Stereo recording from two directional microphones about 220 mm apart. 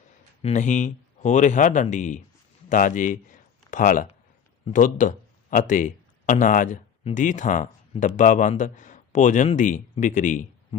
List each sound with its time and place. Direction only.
0.4 s speech: 35° left (ahead or behind)